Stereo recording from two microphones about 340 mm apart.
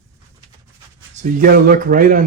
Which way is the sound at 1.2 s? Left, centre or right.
Right.